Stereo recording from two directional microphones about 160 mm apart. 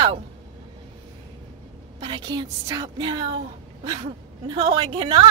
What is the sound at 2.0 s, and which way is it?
Speech, 30° right (ahead or behind).